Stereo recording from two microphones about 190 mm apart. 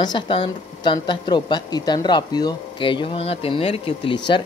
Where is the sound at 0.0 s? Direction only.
25° left (ahead or behind).